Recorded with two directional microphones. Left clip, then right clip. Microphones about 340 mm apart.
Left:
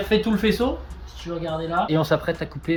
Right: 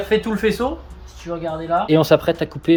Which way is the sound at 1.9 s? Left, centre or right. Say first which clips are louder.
Right 7 dB; right.